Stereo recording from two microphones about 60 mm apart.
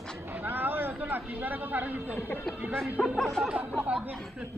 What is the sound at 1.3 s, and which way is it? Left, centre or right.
Speech, right.